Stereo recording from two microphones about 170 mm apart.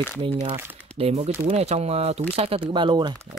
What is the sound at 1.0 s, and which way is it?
Speech, 35° right (ahead or behind).